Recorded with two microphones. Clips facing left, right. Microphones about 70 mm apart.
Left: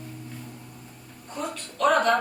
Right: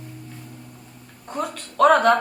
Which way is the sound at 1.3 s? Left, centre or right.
Right.